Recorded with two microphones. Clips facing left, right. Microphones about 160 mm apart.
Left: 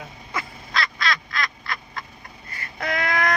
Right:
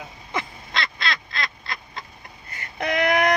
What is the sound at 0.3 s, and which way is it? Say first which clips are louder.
Duck: even; 25° right (ahead or behind).